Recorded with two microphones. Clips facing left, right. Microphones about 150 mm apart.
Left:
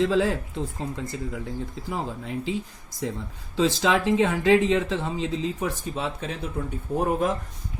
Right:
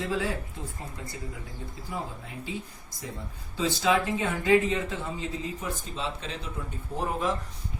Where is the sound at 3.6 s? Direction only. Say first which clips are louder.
Left 3 dB; 90° left.